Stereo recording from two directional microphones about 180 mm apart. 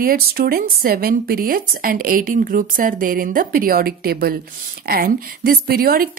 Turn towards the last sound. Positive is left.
turn(degrees=-55)  # may be behind; listen again after turning